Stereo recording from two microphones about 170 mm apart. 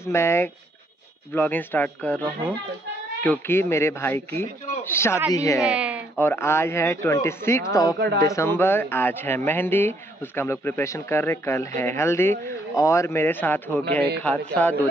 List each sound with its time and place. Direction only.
0.0 s a woman's voice: 15° left (ahead or behind)
5.6 s a sound: 5° right (ahead or behind)
6.1 s speech: 15° left (ahead or behind)